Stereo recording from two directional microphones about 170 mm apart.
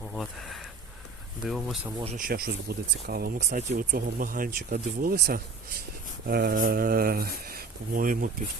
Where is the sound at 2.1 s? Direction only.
60° right (ahead or behind).